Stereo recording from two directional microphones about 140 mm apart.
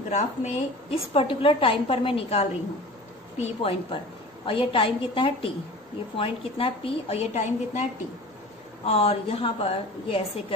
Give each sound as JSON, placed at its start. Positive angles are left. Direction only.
{"t": 0.1, "sound": "a woman's voice", "side_deg": 55}
{"t": 8.8, "sound": "a woman's voice", "side_deg": 45}